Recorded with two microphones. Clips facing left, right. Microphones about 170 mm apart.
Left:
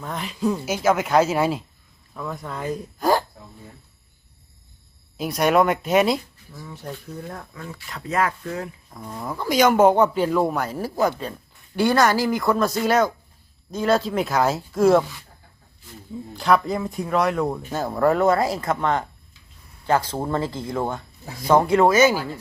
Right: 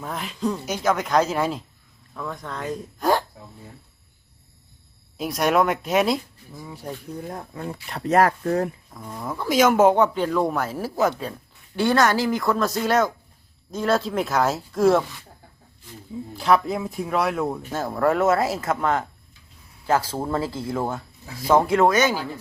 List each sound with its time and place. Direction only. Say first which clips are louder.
0.0 s speech: left 2 dB; centre (ahead or behind)
5.1 s speech: left 2 dB; centre (ahead or behind)
6.5 s speech: right 1 dB; 15° right (ahead or behind)
7.3 s speech: right 3 dB; 30° right (ahead or behind)
8.1 s speech: right 5 dB; 45° right (ahead or behind)
8.9 s speech: even; 5° left (ahead or behind)
16.3 s speech: even; centre (ahead or behind)